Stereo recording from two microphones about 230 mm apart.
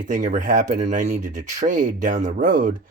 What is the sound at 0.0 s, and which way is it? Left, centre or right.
Speech, right.